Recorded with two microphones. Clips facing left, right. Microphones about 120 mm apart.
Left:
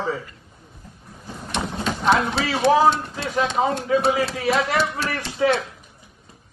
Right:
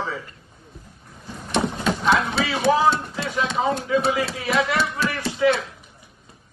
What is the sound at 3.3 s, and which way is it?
A man's voice, 40° left (ahead or behind).